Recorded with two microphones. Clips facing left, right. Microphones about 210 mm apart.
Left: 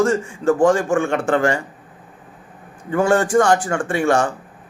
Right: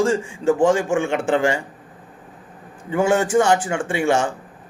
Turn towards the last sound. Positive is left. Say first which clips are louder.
# left 2 dB
turn(degrees=-10)  # may be behind; listen again after turning